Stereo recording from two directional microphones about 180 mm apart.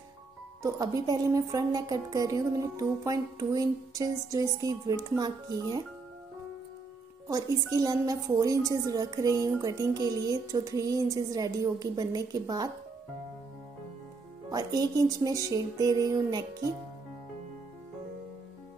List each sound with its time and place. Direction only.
0.6 s a woman's voice: 20° right (ahead or behind)
7.2 s a woman's voice: 20° right (ahead or behind)
14.5 s a woman's voice: 20° right (ahead or behind)